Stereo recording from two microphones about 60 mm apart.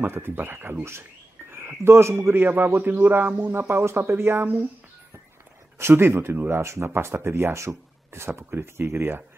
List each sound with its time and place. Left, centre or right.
0.0 s speech: right
3.6 s speech: right
5.8 s speech: right
6.6 s speech: right